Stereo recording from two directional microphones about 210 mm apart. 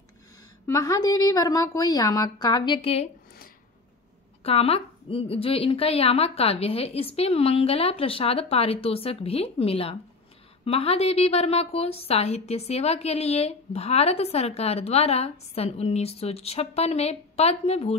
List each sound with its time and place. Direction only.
0.7 s a woman's voice: 15° left (ahead or behind)
4.4 s a woman's voice: 30° left (ahead or behind)